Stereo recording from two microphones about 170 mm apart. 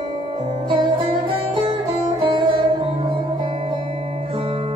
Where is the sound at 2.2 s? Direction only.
30° right (ahead or behind).